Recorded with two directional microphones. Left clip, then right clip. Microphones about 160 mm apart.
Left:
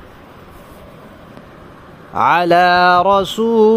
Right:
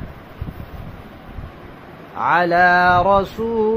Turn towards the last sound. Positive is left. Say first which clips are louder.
# left 7 dB
turn(degrees=65)  # may be behind; listen again after turning